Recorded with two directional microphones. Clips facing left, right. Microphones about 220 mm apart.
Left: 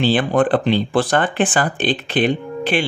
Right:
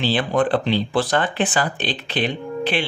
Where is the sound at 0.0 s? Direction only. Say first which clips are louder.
Left 4 dB; 50° left (ahead or behind).